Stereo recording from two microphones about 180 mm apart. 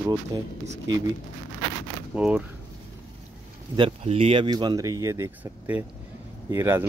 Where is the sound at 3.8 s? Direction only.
30° right (ahead or behind).